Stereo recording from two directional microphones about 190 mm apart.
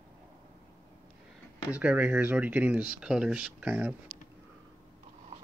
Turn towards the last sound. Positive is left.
turn(degrees=-10)  # may be behind; listen again after turning